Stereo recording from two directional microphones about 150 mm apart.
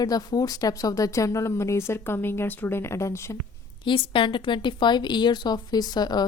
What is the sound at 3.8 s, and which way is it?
A woman's voice, 35° left (ahead or behind).